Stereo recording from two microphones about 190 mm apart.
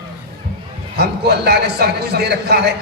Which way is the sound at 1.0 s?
60° right (ahead or behind).